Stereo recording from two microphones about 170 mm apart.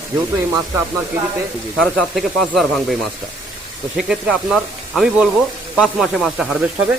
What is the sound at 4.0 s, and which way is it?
Speech, 5° right (ahead or behind).